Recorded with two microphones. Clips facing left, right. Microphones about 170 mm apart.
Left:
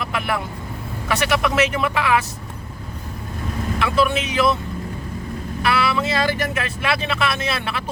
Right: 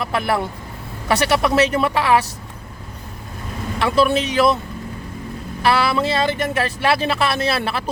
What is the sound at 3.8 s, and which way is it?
Speech, 35° right (ahead or behind).